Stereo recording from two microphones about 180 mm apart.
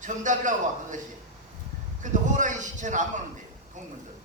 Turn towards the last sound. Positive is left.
turn(degrees=-45)  # may be behind; listen again after turning